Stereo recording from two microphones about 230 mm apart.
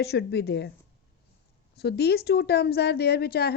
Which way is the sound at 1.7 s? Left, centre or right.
Left.